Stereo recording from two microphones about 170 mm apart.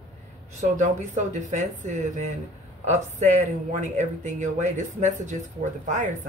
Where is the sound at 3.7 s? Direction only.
45° right (ahead or behind).